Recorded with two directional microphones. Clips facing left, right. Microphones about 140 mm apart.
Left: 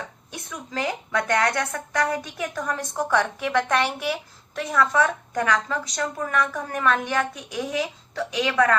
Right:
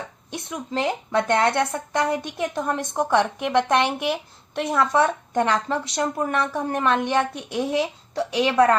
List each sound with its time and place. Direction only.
0.5 s a woman's voice: 25° right (ahead or behind)